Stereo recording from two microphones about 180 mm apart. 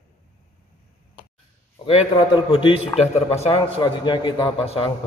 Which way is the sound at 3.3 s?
30° left (ahead or behind).